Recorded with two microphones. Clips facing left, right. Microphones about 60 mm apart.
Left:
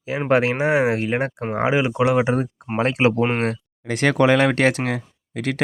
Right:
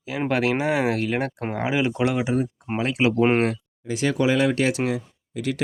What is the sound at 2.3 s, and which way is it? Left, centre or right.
Speech, left.